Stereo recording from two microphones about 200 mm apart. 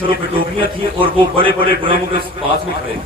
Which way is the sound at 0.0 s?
25° right (ahead or behind).